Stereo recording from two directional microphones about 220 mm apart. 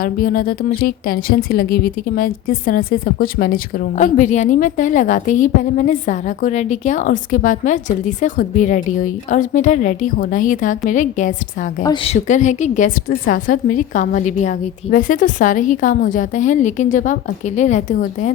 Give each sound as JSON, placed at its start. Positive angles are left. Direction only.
{"t": 0.0, "sound": "speech", "side_deg": 40}
{"t": 11.8, "sound": "speech", "side_deg": 20}